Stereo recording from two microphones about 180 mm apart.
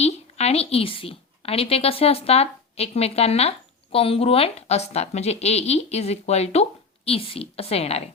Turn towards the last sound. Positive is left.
turn(degrees=35)  # may be behind; listen again after turning